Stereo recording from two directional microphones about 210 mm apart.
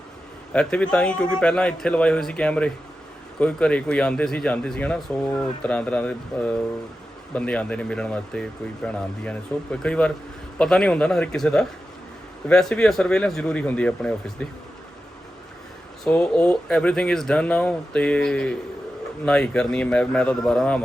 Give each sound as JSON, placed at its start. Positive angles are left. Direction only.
{"t": 0.5, "sound": "speech", "side_deg": 5}
{"t": 16.0, "sound": "speech", "side_deg": 5}